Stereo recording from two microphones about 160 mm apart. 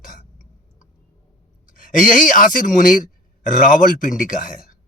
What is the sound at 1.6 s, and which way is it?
A man's voice, 60° left (ahead or behind).